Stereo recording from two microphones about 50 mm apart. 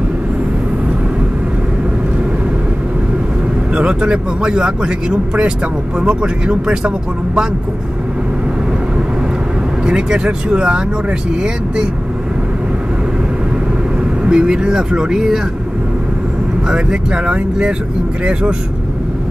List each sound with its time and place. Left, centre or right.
3.7 s speech: centre
9.8 s speech: centre
14.2 s speech: centre
16.6 s speech: centre